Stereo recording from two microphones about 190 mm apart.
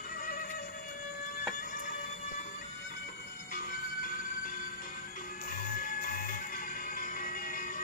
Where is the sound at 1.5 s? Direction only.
45° left (ahead or behind).